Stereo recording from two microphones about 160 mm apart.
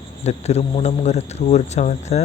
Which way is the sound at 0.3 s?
45° left (ahead or behind).